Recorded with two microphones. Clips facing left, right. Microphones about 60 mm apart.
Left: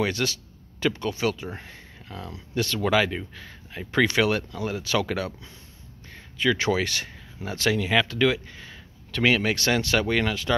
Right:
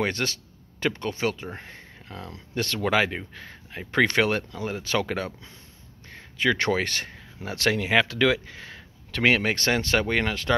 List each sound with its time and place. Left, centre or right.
0.0 s speech: right
6.0 s a sound: right
7.5 s speech: right
8.1 s speech: right